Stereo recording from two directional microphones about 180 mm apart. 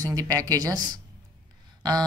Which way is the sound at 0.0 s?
20° right (ahead or behind).